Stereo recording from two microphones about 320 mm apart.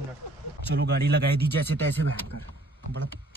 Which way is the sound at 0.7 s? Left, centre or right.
Right.